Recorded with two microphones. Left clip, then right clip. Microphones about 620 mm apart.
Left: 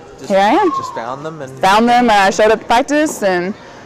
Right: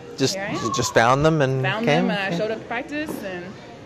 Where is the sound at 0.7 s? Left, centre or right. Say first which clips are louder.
Right 3 dB; right.